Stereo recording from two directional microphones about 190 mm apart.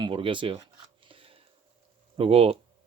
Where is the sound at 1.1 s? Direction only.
30° right (ahead or behind).